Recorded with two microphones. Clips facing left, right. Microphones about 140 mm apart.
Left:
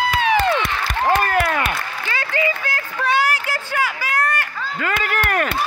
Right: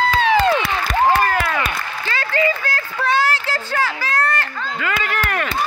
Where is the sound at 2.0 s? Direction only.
15° left (ahead or behind).